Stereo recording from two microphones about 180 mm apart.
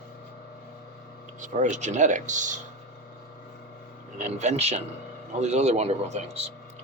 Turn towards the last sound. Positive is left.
turn(degrees=-35)  # may be behind; listen again after turning